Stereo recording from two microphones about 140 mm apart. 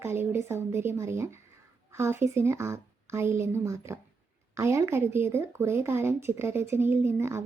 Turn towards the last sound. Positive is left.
turn(degrees=-20)  # may be behind; listen again after turning